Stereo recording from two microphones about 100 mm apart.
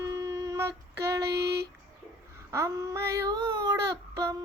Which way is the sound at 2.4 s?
30° right (ahead or behind).